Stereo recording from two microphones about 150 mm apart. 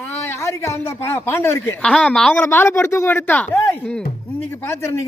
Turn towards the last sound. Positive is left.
turn(degrees=20)  # may be behind; listen again after turning